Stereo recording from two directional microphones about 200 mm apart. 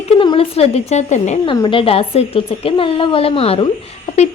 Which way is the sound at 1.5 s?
25° left (ahead or behind).